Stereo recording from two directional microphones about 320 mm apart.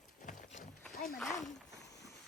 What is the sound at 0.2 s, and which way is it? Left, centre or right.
Clip-clop, left.